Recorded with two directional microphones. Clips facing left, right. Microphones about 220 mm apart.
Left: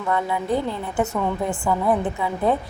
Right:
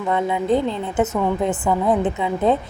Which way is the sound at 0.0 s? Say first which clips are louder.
Right 3 dB; 20° right (ahead or behind).